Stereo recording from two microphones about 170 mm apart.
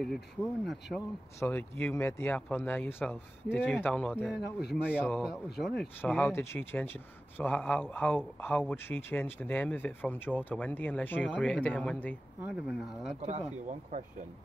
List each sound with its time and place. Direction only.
0.0 s speech: centre (ahead or behind)
1.4 s speech: 10° left (ahead or behind)
12.4 s speech: 10° right (ahead or behind)
13.1 s speech: 35° right (ahead or behind)